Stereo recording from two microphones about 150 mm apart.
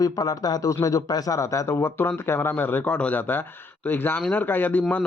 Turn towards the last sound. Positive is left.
turn(degrees=10)  # may be behind; listen again after turning